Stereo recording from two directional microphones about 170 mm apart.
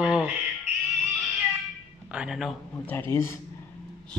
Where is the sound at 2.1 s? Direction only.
5° right (ahead or behind).